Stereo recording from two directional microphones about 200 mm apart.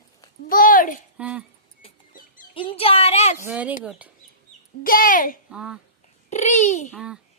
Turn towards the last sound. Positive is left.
turn(degrees=-5)  # may be behind; listen again after turning